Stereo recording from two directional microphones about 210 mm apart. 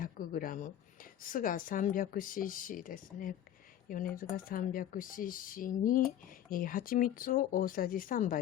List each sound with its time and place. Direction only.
0.0 s speech: 40° left (ahead or behind)